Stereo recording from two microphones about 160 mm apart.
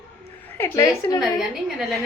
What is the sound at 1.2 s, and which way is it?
Speech, centre (ahead or behind).